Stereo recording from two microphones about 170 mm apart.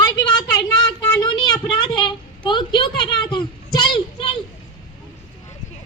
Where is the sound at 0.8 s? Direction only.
25° left (ahead or behind).